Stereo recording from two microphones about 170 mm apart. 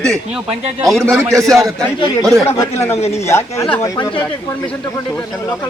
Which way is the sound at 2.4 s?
15° left (ahead or behind).